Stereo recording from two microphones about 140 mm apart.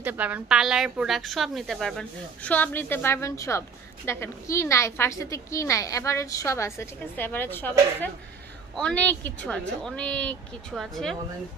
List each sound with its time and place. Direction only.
0.0 s speech: 10° right (ahead or behind)